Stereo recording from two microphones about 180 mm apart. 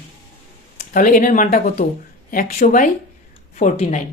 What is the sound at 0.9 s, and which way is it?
Speech, 50° left (ahead or behind).